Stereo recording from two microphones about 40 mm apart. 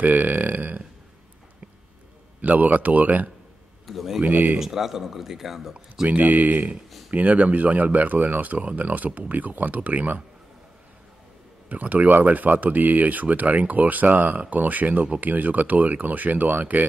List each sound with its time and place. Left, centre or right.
0.0 s speech: right
2.4 s speech: right
3.8 s speech: centre
4.2 s speech: right
4.6 s a man's voice: centre
6.0 s speech: right
11.7 s speech: right